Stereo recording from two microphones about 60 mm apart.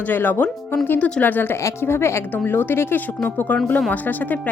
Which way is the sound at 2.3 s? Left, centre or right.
Left.